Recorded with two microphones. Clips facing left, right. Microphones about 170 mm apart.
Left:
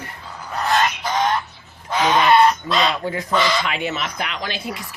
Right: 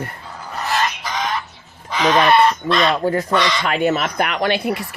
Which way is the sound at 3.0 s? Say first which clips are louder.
Right 7 dB; 45° right (ahead or behind).